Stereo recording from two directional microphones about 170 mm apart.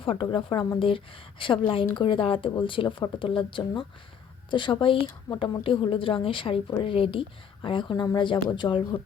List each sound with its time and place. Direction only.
0.0 s a woman's voice: 30° left (ahead or behind)